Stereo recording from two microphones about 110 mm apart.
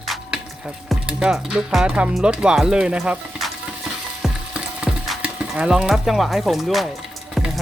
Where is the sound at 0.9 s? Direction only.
5° right (ahead or behind).